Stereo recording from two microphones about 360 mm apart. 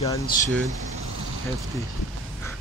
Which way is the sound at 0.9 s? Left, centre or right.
Right.